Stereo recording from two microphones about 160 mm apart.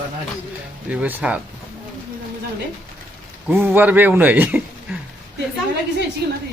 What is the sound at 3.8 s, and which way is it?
Speech, 10° right (ahead or behind).